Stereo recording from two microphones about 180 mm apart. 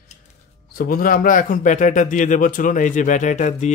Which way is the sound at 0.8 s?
50° left (ahead or behind).